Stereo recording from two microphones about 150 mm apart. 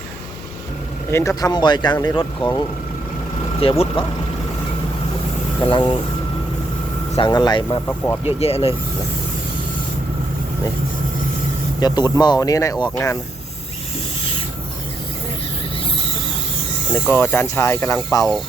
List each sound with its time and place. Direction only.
1.1 s speech: 20° left (ahead or behind)
3.6 s speech: 35° left (ahead or behind)
5.7 s speech: 35° left (ahead or behind)
7.2 s speech: 30° left (ahead or behind)
7.9 s speech: 15° left (ahead or behind)
8.4 s speech: 40° left (ahead or behind)
11.9 s speech: 30° left (ahead or behind)
16.9 s speech: 15° left (ahead or behind)